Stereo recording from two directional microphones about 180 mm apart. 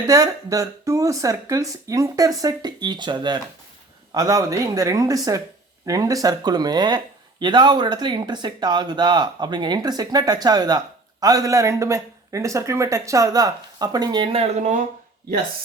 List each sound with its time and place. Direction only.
0.1 s speech: 20° right (ahead or behind); by 14.8 s 35° right (ahead or behind)